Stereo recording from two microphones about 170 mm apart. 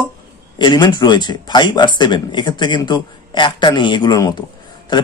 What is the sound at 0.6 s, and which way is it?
Speech, 25° left (ahead or behind).